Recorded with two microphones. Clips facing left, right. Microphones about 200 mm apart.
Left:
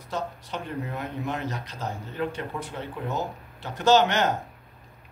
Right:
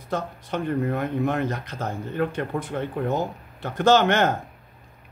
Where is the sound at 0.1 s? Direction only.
55° right (ahead or behind).